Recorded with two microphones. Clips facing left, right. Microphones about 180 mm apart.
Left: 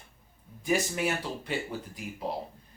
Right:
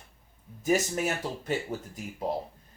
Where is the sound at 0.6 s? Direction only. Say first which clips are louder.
Right 2 dB; 45° right (ahead or behind).